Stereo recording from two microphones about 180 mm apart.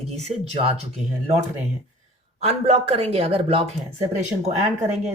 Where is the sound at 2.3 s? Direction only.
35° right (ahead or behind).